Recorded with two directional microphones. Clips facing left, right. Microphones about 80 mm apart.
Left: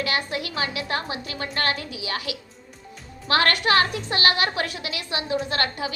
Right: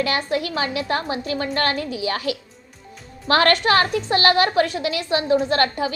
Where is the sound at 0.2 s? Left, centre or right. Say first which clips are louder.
Right 5 dB; right.